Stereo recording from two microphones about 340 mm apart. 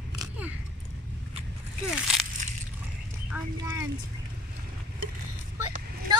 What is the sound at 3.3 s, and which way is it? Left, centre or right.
Speech, centre.